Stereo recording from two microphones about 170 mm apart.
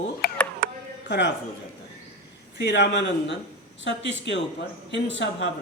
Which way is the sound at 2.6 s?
90° left.